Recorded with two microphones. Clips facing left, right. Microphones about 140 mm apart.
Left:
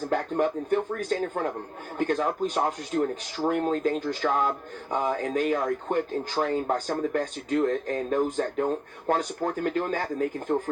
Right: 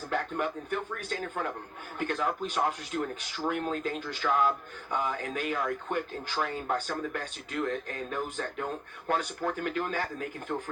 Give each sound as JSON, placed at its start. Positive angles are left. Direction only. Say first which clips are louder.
{"t": 0.1, "sound": "speech", "louder": "left 5 dB", "side_deg": 40}